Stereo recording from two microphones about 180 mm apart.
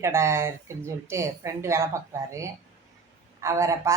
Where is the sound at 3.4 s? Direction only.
15° right (ahead or behind).